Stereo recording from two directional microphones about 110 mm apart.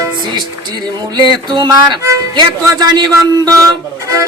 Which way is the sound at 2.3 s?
40° right (ahead or behind).